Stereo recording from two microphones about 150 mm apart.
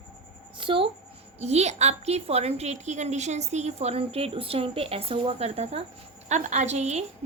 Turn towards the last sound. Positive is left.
turn(degrees=-50)  # may be behind; listen again after turning